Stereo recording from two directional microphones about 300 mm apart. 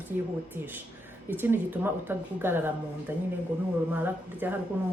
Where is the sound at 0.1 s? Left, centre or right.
Centre.